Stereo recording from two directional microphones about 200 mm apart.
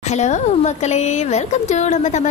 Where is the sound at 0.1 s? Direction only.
35° left (ahead or behind).